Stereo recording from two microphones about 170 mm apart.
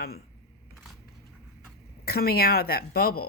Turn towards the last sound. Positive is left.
turn(degrees=65)  # may be behind; listen again after turning